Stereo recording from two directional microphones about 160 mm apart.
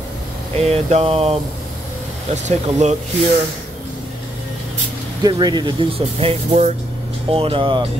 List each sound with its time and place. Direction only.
0.6 s speech: 40° right (ahead or behind)
2.3 s speech: 45° right (ahead or behind)
5.2 s speech: 25° right (ahead or behind)